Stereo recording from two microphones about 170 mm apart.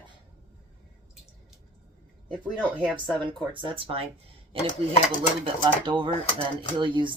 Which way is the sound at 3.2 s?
30° right (ahead or behind).